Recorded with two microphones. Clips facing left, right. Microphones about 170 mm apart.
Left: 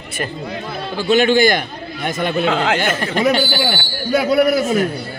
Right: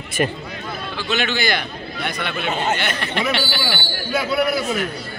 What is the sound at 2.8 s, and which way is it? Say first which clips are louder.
A man's voice: left 6 dB; 45° left (ahead or behind).